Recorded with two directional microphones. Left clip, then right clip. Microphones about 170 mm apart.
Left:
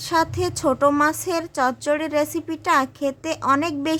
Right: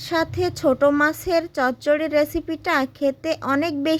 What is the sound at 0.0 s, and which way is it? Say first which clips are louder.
A woman's voice: left 1 dB; 15° right (ahead or behind).